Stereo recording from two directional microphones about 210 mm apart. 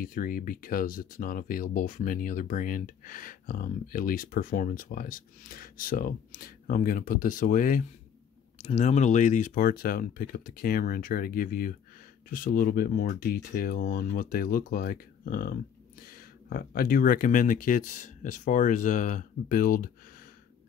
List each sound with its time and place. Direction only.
0.0 s speech: 40° left (ahead or behind)